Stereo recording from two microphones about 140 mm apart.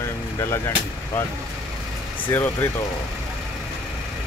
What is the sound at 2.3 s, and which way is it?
Speech, 15° left (ahead or behind).